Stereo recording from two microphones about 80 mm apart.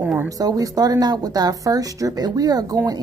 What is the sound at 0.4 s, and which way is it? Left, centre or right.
Speech, right.